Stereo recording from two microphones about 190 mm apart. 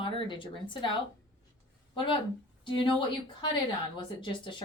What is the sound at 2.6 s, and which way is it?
A woman's voice, 25° left (ahead or behind).